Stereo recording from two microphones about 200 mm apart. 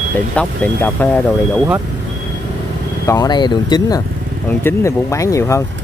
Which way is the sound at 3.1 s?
20° left (ahead or behind).